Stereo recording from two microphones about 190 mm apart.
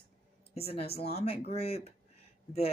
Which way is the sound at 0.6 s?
30° left (ahead or behind).